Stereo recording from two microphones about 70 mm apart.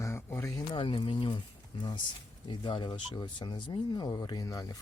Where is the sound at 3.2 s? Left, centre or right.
Left.